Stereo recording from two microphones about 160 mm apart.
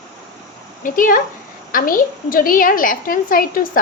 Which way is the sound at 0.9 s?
60° left (ahead or behind).